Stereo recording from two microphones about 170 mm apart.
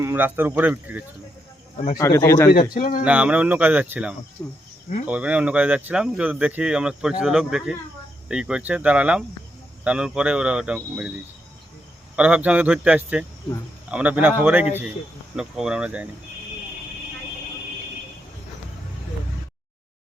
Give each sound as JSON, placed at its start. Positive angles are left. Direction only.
{"t": 0.0, "sound": "speech", "side_deg": -15}
{"t": 2.0, "sound": "speech", "side_deg": 15}
{"t": 2.7, "sound": "speech", "side_deg": 50}
{"t": 3.0, "sound": "speech", "side_deg": -5}
{"t": 4.4, "sound": "speech", "side_deg": 15}
{"t": 5.0, "sound": "speech", "side_deg": -5}
{"t": 12.1, "sound": "speech", "side_deg": -5}